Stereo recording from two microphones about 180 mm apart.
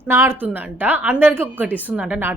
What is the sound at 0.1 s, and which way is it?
A woman's voice, 15° right (ahead or behind).